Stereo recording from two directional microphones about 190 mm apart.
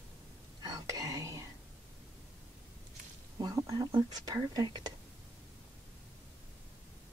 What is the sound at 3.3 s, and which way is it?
Speech, 20° right (ahead or behind).